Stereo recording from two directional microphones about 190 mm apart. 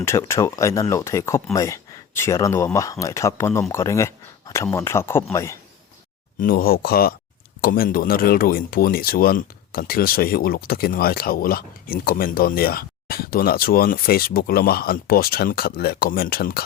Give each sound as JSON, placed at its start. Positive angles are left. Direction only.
{"t": 0.0, "sound": "speech", "side_deg": 15}
{"t": 6.4, "sound": "speech", "side_deg": 50}